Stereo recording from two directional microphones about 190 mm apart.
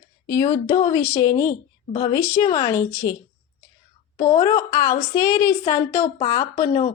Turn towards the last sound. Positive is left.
turn(degrees=20)  # may be behind; listen again after turning